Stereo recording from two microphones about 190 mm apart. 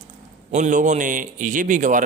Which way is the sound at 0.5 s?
40° right (ahead or behind).